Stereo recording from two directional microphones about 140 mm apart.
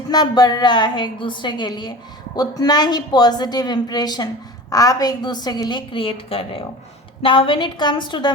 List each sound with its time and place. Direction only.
0.1 s a woman's voice: 30° left (ahead or behind)